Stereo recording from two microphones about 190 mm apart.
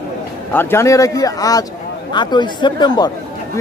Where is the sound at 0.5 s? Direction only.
15° left (ahead or behind).